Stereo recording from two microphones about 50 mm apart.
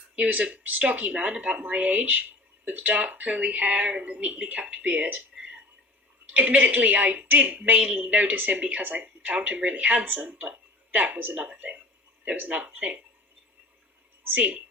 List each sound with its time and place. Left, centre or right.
0.3 s speech: right
6.3 s speech: right
11.2 s speech: right
11.4 s speech: right
14.3 s speech: right